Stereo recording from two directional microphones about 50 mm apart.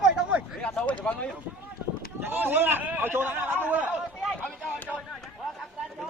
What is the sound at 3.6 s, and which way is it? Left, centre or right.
Chatter, right.